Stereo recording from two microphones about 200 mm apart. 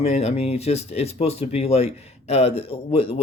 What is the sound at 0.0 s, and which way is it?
Speech, 30° left (ahead or behind).